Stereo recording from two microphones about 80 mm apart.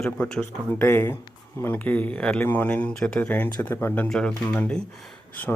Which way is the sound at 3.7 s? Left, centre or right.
Left.